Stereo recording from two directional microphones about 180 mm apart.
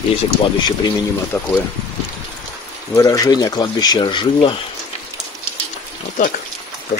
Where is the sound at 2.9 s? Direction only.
20° left (ahead or behind).